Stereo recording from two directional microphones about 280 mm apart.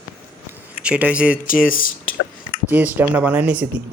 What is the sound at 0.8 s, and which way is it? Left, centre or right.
Speech, centre.